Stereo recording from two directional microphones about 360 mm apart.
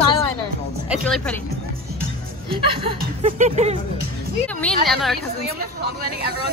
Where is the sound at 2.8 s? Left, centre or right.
Centre.